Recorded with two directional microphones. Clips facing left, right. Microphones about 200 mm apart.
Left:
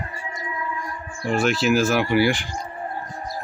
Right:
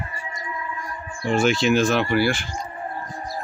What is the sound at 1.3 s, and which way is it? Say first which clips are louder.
Speech: right 1 dB; centre (ahead or behind).